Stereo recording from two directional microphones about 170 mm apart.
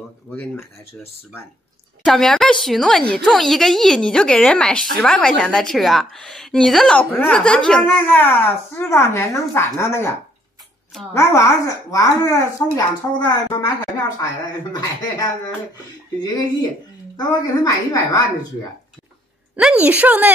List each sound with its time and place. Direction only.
0.3 s a woman's voice: 5° left (ahead or behind)
2.0 s a woman's voice: centre (ahead or behind)
11.1 s speech: 15° left (ahead or behind)
17.2 s speech: 20° left (ahead or behind)
19.5 s a woman's voice: 5° right (ahead or behind)